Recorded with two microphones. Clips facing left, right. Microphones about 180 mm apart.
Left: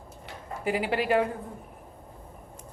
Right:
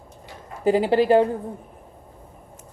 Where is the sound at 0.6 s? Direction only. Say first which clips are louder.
Right 9 dB; 30° right (ahead or behind).